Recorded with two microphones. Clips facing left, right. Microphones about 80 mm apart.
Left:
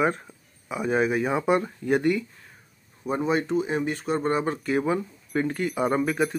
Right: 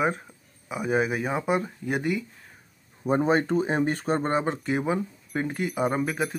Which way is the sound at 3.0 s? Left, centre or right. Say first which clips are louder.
Right 2 dB; right.